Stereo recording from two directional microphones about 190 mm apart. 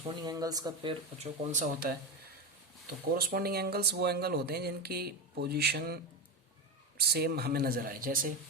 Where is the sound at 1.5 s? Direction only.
45° right (ahead or behind).